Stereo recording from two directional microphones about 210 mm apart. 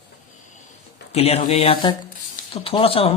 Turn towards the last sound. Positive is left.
turn(degrees=25)  # may be behind; listen again after turning